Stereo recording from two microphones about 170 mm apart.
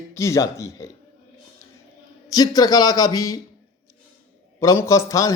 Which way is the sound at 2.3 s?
20° left (ahead or behind).